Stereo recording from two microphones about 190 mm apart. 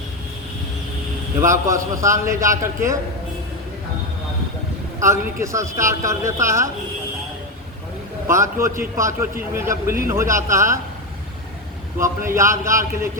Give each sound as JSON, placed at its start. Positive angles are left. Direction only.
{"t": 1.4, "sound": "a woman's voice", "side_deg": -15}
{"t": 4.9, "sound": "a woman's voice", "side_deg": -15}
{"t": 8.3, "sound": "a woman's voice", "side_deg": -15}
{"t": 11.9, "sound": "a woman's voice", "side_deg": -15}